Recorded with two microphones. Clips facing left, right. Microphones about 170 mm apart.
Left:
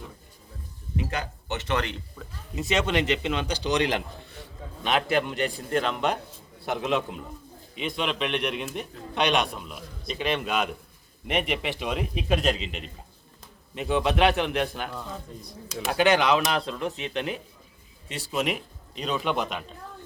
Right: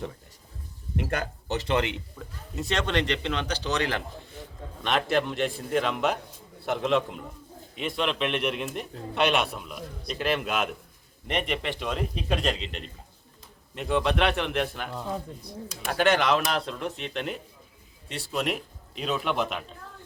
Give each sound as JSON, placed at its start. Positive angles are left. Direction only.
{"t": 0.9, "sound": "speech", "side_deg": -50}
{"t": 1.5, "sound": "speech", "side_deg": -30}
{"t": 2.1, "sound": "speech", "side_deg": 0}
{"t": 4.8, "sound": "a man's voice", "side_deg": 0}
{"t": 15.9, "sound": "a man's voice", "side_deg": 0}